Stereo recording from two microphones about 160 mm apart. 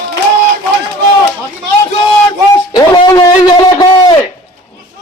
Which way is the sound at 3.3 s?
25° left (ahead or behind).